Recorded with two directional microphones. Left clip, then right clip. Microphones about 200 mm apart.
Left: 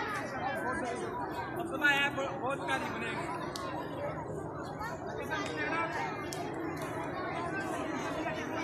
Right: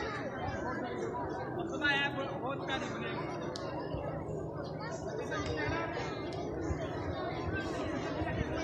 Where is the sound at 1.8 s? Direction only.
10° right (ahead or behind).